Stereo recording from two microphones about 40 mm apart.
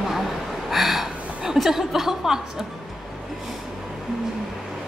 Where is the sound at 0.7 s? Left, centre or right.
Centre.